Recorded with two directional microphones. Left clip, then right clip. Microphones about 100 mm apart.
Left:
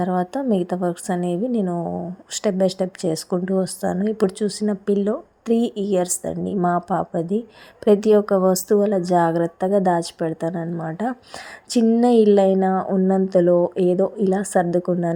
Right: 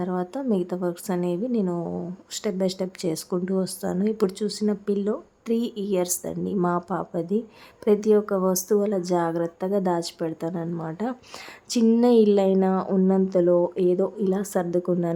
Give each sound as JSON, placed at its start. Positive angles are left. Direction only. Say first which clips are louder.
{"t": 0.0, "sound": "speech", "louder": "left 6 dB", "side_deg": 40}
{"t": 1.8, "sound": "speech", "louder": "left 4 dB", "side_deg": 10}
{"t": 2.3, "sound": "speech", "louder": "left 6 dB", "side_deg": 40}
{"t": 7.9, "sound": "a woman's voice", "louder": "left 5 dB", "side_deg": 40}